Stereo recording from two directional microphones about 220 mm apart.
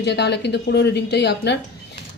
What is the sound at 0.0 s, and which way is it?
A woman's voice, 50° left (ahead or behind).